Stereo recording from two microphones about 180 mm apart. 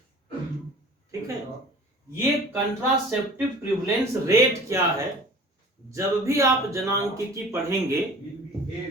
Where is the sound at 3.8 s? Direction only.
15° right (ahead or behind).